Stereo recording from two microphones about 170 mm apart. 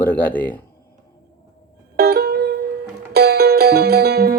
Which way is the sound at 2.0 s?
70° right (ahead or behind).